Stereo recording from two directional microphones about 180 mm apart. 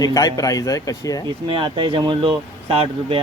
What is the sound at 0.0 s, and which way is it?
A man's voice, 20° left (ahead or behind).